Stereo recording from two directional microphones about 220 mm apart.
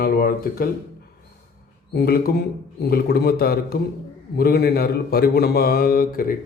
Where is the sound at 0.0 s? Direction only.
40° left (ahead or behind).